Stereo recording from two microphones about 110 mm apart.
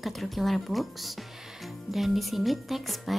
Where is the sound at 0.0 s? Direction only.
Centre (ahead or behind).